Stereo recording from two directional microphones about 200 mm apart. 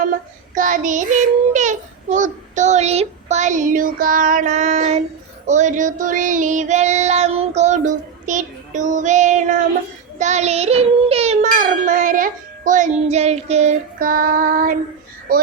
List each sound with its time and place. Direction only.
0.5 s child singing: 40° right (ahead or behind)
10.2 s music: 35° right (ahead or behind)